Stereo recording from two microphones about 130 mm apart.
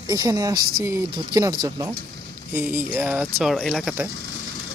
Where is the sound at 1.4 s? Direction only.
30° right (ahead or behind).